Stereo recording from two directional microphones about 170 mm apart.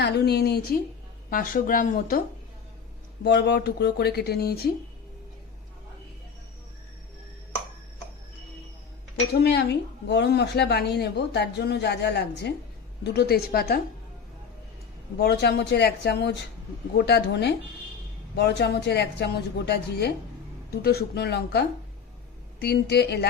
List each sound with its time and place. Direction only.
0.0 s speech: 75° left (ahead or behind)
1.3 s speech: 55° left (ahead or behind)
3.2 s speech: 85° left; by 4.7 s 65° left (ahead or behind)
9.4 s a woman's voice: 75° left (ahead or behind)
13.1 s speech: 70° left (ahead or behind)
15.2 s speech: 75° left (ahead or behind)
22.6 s speech: 75° left (ahead or behind)